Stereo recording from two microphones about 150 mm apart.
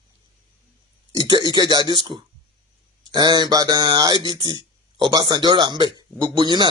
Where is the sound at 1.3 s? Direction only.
30° right (ahead or behind).